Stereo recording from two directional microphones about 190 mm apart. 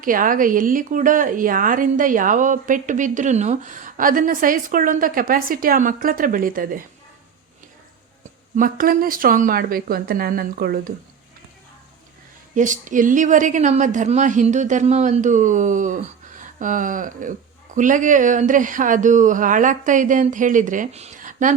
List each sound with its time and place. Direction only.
0.0 s speech: 45° right (ahead or behind)
8.5 s speech: 45° right (ahead or behind)
12.5 s a woman's voice: 40° right (ahead or behind)